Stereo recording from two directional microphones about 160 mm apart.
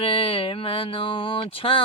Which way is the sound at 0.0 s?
35° left (ahead or behind).